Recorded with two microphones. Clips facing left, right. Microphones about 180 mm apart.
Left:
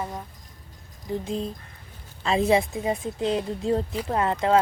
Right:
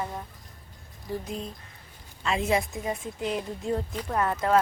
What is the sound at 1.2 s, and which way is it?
A woman's voice, 30° left (ahead or behind).